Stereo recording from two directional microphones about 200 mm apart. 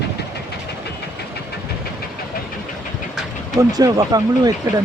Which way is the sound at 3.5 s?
20° right (ahead or behind).